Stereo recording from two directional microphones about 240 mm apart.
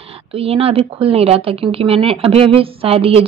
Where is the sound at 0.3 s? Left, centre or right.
Right.